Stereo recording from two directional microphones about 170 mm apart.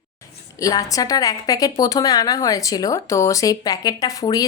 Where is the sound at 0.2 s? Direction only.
20° left (ahead or behind).